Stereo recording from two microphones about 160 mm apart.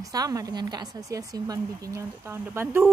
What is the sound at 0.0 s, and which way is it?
A woman's voice, 20° right (ahead or behind).